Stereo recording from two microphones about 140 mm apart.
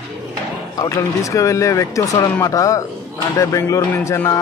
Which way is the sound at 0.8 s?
20° left (ahead or behind).